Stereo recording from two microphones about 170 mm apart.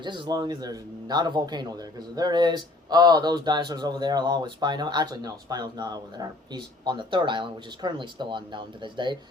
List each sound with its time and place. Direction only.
0.0 s a man's voice: 25° right (ahead or behind)